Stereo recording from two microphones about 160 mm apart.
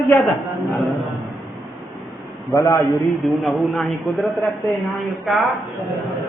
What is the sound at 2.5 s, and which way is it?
Speech, 20° left (ahead or behind).